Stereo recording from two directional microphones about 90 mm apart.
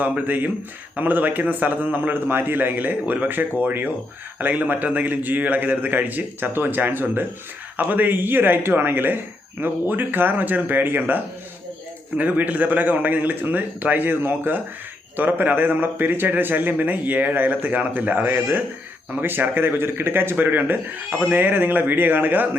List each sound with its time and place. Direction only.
0.0 s a man's voice: 20° right (ahead or behind)